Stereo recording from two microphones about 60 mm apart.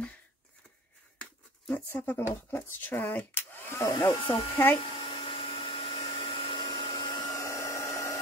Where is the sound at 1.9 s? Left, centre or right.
Left.